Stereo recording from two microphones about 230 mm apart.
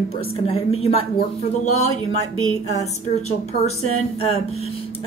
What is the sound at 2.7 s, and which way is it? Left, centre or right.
A woman's voice, left.